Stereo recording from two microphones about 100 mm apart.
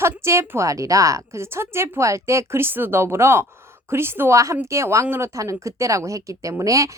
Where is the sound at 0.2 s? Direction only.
25° right (ahead or behind).